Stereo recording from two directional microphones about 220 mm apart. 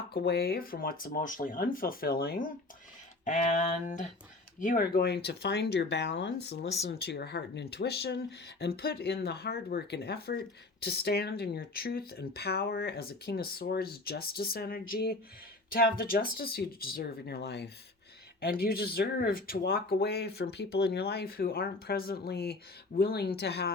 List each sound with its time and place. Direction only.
0.1 s speech: 45° left (ahead or behind)